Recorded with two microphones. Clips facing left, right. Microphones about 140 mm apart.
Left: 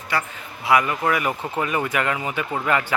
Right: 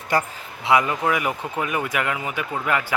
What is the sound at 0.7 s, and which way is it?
Speech, 25° right (ahead or behind).